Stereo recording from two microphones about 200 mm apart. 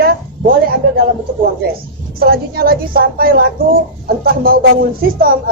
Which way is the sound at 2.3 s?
50° right (ahead or behind).